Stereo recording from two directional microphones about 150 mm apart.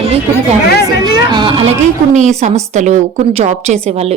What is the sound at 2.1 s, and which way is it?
A woman's voice, 50° right (ahead or behind).